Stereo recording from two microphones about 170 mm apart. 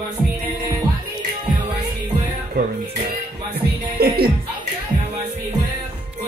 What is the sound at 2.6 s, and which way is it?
Music, 70° right (ahead or behind).